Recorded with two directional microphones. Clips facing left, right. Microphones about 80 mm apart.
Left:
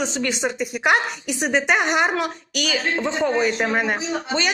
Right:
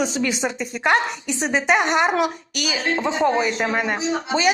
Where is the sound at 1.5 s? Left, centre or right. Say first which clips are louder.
Right 1 dB; centre.